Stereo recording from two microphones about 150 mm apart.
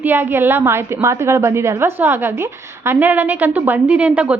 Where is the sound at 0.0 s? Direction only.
15° right (ahead or behind).